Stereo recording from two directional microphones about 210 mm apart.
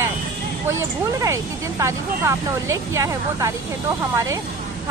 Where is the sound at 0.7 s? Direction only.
15° right (ahead or behind).